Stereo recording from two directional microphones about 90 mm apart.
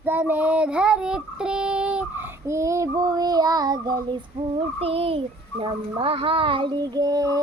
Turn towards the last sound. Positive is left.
turn(degrees=-45)  # may be behind; listen again after turning